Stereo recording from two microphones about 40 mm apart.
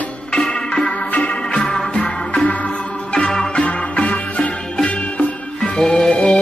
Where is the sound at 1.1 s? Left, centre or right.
Left.